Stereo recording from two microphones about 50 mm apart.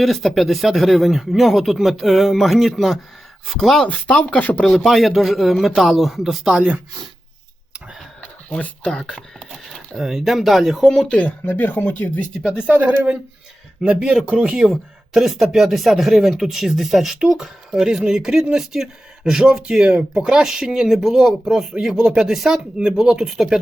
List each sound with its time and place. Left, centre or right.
0.0 s speech: centre
3.8 s speech: left
4.6 s speech: centre
8.5 s speech: left
8.9 s speech: centre
10.0 s speech: centre
11.1 s speech: left
11.4 s speech: left
12.6 s speech: right
13.8 s speech: centre
14.6 s speech: centre